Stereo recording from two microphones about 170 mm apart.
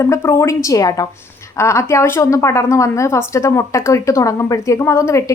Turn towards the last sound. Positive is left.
turn(degrees=15)  # may be behind; listen again after turning